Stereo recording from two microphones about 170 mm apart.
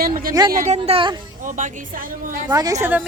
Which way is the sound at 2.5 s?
20° right (ahead or behind).